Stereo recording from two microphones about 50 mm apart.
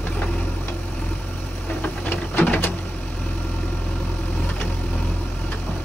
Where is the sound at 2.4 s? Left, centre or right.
Left.